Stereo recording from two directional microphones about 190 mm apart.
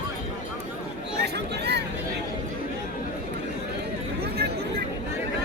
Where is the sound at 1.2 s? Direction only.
60° right (ahead or behind).